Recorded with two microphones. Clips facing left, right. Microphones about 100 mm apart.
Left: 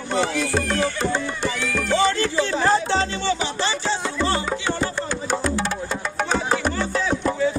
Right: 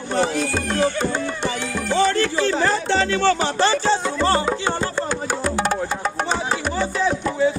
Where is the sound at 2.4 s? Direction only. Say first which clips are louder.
Left 3 dB; 75° right (ahead or behind).